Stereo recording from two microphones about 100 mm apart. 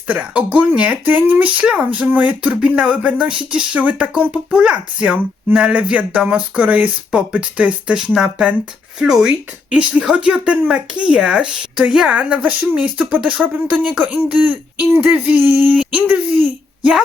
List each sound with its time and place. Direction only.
0.1 s speech: 15° right (ahead or behind)